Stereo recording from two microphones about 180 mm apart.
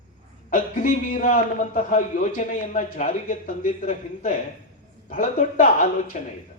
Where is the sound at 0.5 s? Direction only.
50° left (ahead or behind).